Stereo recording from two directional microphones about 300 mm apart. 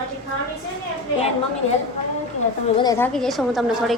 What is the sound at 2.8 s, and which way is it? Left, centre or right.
A woman's voice, centre.